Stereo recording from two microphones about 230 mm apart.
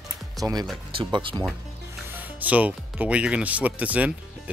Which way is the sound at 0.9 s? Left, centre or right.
Right.